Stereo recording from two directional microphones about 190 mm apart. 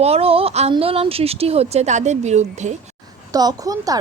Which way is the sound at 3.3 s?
20° right (ahead or behind).